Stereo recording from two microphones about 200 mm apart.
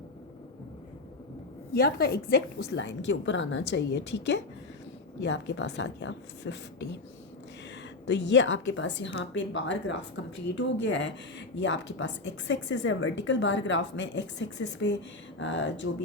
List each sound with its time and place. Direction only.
1.7 s a woman's voice: 50° left (ahead or behind)
8.0 s a woman's voice: 60° left (ahead or behind)